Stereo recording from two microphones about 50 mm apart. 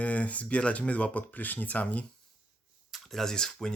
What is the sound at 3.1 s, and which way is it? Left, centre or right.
Speech, centre.